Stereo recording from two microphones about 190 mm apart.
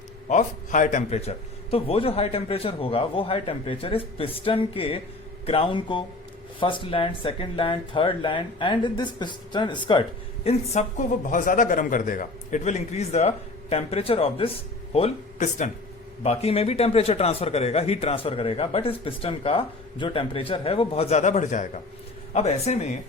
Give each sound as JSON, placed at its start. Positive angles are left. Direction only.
{"t": 0.3, "sound": "a man's voice", "side_deg": 40}